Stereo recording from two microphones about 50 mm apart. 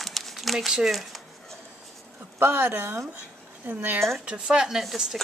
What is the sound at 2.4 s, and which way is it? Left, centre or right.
Speech, right.